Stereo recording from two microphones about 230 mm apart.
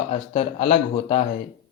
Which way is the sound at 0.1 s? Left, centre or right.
Left.